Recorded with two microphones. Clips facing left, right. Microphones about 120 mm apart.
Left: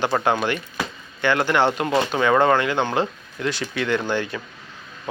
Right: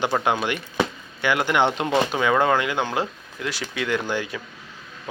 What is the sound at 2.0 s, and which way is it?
Speech, 5° right (ahead or behind).